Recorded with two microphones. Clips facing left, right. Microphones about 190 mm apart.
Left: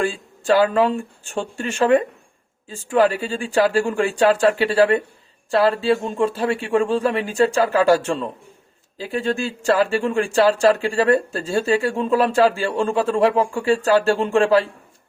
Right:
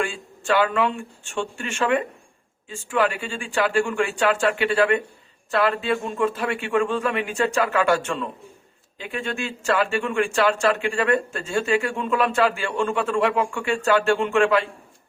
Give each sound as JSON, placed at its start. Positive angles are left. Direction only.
{"t": 0.0, "sound": "speech", "side_deg": 35}